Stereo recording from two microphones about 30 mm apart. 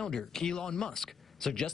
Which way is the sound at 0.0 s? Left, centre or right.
Centre.